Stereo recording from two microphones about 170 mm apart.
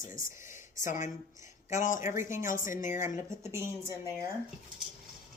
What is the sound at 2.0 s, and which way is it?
Speech, 15° right (ahead or behind).